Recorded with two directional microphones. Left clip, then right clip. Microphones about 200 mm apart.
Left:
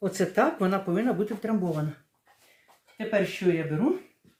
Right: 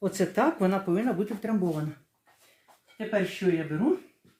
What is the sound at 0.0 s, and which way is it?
Speech, centre (ahead or behind).